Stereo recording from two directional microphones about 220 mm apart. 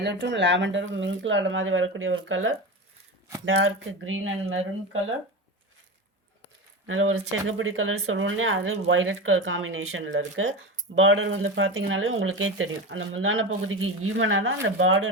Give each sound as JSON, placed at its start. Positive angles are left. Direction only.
{"t": 0.0, "sound": "speech", "side_deg": -50}
{"t": 6.8, "sound": "speech", "side_deg": -65}